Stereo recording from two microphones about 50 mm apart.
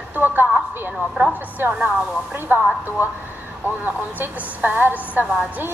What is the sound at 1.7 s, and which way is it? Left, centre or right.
Speech, right.